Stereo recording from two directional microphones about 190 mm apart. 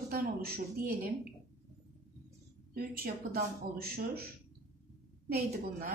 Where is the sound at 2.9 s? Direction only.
50° right (ahead or behind).